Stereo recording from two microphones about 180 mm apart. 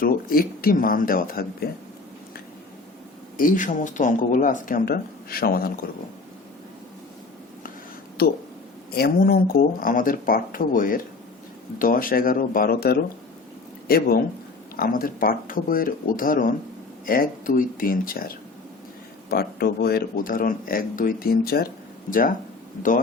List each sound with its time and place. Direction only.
0.0 s speech: 55° left (ahead or behind)
3.3 s speech: 50° left (ahead or behind)
8.2 s speech: 60° left (ahead or behind)